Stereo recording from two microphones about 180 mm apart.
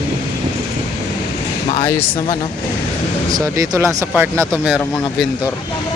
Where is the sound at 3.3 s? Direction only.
15° right (ahead or behind).